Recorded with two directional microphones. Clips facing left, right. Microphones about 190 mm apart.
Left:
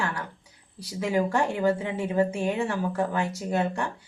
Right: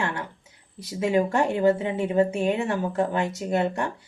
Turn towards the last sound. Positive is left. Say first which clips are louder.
# right 2 dB
turn(degrees=-20)  # may be behind; listen again after turning